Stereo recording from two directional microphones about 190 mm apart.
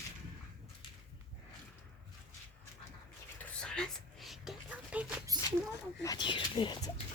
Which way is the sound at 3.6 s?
5° left (ahead or behind).